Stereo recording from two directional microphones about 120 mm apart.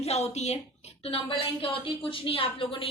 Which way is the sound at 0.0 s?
65° left (ahead or behind).